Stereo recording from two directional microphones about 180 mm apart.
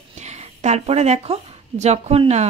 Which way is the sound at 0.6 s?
40° right (ahead or behind).